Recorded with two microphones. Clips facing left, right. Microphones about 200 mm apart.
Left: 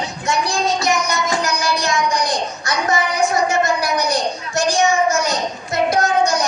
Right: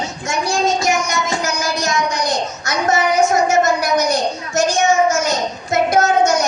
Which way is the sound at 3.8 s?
35° left (ahead or behind).